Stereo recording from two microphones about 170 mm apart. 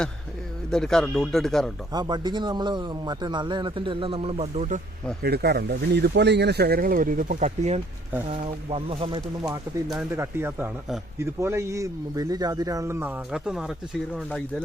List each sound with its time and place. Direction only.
0.7 s speech: 5° left (ahead or behind)
1.9 s speech: 25° right (ahead or behind); by 4.8 s 40° right (ahead or behind)
5.2 s speech: 70° right (ahead or behind); by 7.8 s 45° right (ahead or behind)
8.3 s speech: 30° right (ahead or behind)
10.2 s a man's voice: 15° right (ahead or behind)